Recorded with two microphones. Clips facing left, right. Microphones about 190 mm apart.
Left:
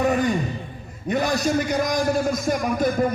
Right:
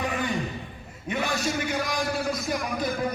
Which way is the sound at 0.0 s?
45° left (ahead or behind).